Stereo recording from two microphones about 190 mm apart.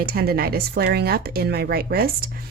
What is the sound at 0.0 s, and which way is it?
A woman's voice, 55° right (ahead or behind).